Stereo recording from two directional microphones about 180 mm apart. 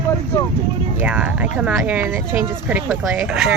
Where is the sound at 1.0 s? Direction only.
5° right (ahead or behind).